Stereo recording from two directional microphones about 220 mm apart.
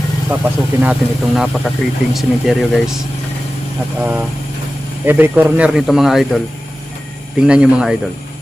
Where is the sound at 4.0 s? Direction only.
5° right (ahead or behind).